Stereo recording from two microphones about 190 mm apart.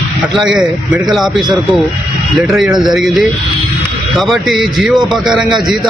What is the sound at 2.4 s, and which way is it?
A man's voice, 5° right (ahead or behind).